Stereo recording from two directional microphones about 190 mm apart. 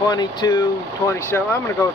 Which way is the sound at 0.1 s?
20° left (ahead or behind).